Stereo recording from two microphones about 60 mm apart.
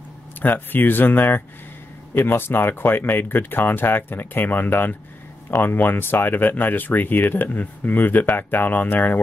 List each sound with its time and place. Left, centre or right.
0.4 s speech: left